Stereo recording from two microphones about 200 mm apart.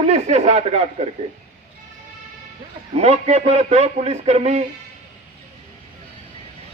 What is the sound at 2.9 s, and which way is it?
A man's voice, 30° right (ahead or behind).